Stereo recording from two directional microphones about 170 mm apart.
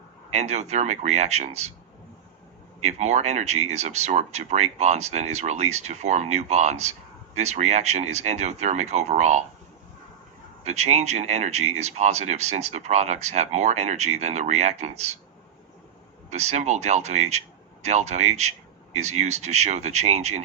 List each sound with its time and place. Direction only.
0.3 s speech: 40° right (ahead or behind)
2.8 s speech: 40° right (ahead or behind)
10.6 s speech: 40° right (ahead or behind)
16.3 s speech: 40° right (ahead or behind)